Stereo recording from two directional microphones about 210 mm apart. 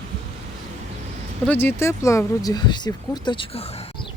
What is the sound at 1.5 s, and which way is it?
Speech, 10° left (ahead or behind).